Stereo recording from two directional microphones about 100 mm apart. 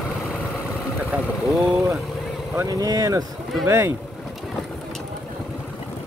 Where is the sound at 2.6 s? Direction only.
40° right (ahead or behind).